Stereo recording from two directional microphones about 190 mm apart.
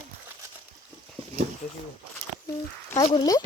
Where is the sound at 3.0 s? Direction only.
25° left (ahead or behind).